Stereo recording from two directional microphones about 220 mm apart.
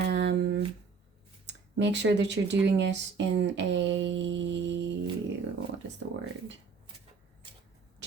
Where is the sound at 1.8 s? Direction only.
50° right (ahead or behind).